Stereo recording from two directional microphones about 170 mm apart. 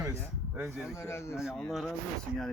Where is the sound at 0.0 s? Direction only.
15° right (ahead or behind).